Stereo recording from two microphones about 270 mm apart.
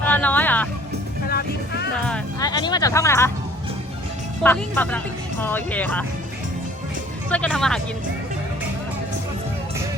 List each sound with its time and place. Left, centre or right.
0.0 s vehicle: centre
1.3 s vehicle: left
2.0 s music: centre
2.5 s speech: centre
4.4 s speech: centre
7.3 s speech: centre